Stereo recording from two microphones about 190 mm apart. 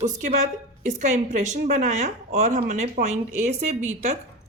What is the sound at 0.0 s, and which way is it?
Speech, 40° right (ahead or behind).